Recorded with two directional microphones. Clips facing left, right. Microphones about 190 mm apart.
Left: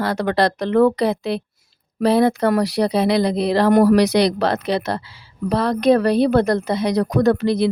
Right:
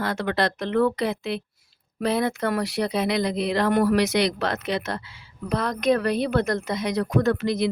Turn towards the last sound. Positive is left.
turn(degrees=35)  # may be behind; listen again after turning